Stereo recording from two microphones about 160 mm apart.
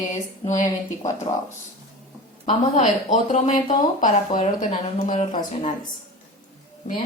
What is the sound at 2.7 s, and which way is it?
Speech, 50° left (ahead or behind).